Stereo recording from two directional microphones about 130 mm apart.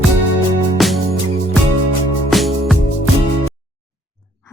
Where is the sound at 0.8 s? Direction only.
Centre (ahead or behind).